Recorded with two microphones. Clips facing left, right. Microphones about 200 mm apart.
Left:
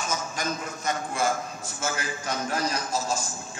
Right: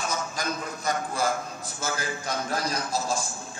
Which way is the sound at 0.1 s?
35° right (ahead or behind).